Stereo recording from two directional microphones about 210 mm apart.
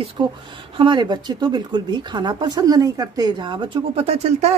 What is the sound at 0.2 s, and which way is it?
Speech, 25° right (ahead or behind).